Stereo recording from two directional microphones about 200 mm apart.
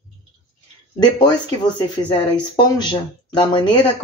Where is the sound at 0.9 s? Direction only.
20° left (ahead or behind).